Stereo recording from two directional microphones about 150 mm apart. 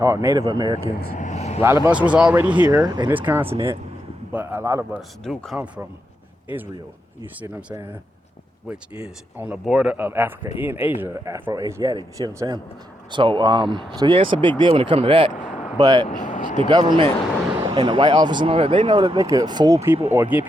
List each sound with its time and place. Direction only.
0.0 s speech: 20° right (ahead or behind)
1.2 s vehicle: 50° left (ahead or behind)
1.6 s speech: 15° right (ahead or behind)
2.6 s speech: 25° right (ahead or behind)
3.1 s speech: 10° right (ahead or behind)
5.2 s speech: centre (ahead or behind)
9.4 s speech: 5° right (ahead or behind); by 15.3 s 35° right (ahead or behind)
15.8 s speech: 25° right (ahead or behind)
16.0 s speech: 60° left (ahead or behind)
16.6 s speech: 30° right (ahead or behind); by 20.4 s 10° right (ahead or behind)